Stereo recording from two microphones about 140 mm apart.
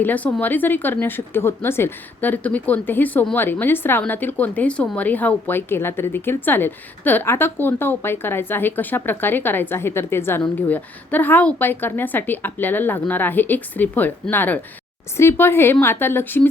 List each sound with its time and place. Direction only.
0.0 s a woman's voice: 10° left (ahead or behind)